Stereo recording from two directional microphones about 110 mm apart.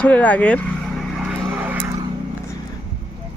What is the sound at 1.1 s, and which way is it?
Vehicle, 10° right (ahead or behind).